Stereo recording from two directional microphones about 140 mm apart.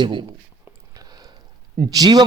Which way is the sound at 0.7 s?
25° right (ahead or behind).